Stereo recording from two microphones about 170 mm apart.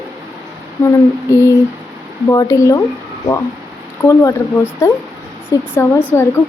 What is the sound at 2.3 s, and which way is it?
Speech, 20° left (ahead or behind).